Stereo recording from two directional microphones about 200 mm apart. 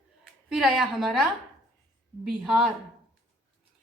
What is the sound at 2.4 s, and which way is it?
Speech, centre (ahead or behind).